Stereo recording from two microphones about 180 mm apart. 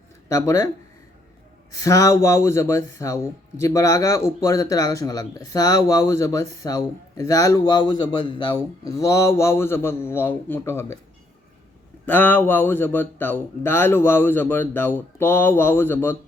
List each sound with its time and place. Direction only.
0.3 s speech: 15° left (ahead or behind)
1.8 s speech: 20° left (ahead or behind)
12.0 s speech: 10° left (ahead or behind)